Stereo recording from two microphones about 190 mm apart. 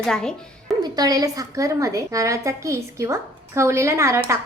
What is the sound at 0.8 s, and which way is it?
A woman's voice, 20° right (ahead or behind).